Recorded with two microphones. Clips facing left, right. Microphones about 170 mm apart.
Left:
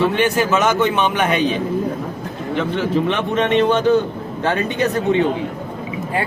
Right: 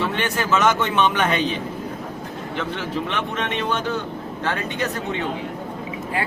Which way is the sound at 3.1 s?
20° left (ahead or behind).